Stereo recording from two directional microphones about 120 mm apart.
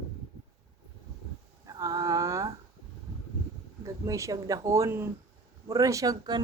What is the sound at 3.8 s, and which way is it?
Speech, 25° right (ahead or behind).